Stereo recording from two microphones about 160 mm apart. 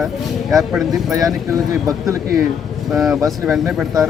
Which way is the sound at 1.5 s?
20° right (ahead or behind).